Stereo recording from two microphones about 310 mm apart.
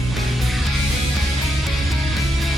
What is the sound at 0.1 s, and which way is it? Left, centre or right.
Music, centre.